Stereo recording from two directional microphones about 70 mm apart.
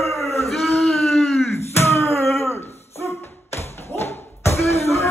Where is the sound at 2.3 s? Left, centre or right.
Left.